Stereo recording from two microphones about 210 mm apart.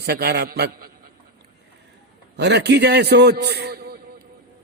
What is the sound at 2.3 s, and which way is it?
A man's voice, 55° right (ahead or behind).